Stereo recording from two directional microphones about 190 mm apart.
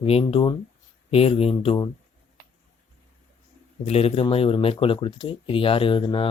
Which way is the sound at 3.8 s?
30° left (ahead or behind).